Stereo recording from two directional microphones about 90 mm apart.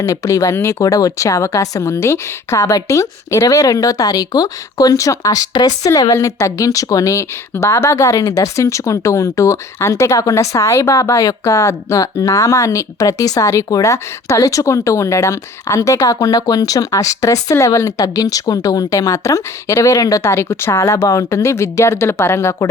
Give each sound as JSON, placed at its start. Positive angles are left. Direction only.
{"t": 0.0, "sound": "speech", "side_deg": 40}